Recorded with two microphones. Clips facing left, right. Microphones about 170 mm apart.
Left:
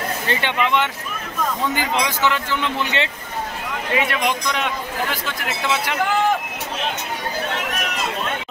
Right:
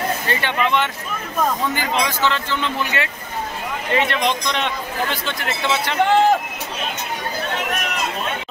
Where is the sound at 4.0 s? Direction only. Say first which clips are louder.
Right 1 dB; 5° left (ahead or behind).